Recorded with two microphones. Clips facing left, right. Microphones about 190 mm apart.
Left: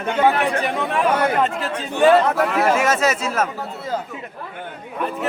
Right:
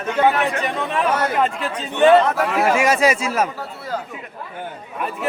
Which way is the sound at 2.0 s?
Centre (ahead or behind).